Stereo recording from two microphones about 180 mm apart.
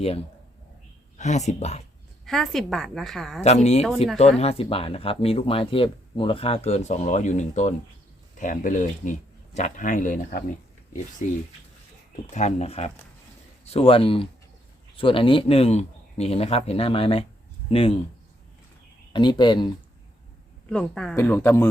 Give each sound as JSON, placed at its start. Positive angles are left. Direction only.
{"t": 1.2, "sound": "speech", "side_deg": 40}
{"t": 2.2, "sound": "a woman's voice", "side_deg": 0}
{"t": 3.4, "sound": "speech", "side_deg": 35}
{"t": 3.8, "sound": "a woman's voice", "side_deg": 0}
{"t": 4.4, "sound": "speech", "side_deg": 35}
{"t": 19.1, "sound": "speech", "side_deg": 25}
{"t": 20.7, "sound": "a woman's voice", "side_deg": 5}